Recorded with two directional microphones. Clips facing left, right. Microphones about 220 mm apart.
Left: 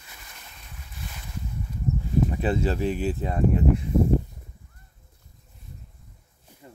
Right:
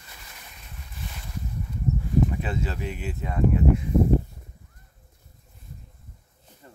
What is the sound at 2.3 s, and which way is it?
Speech, 30° left (ahead or behind).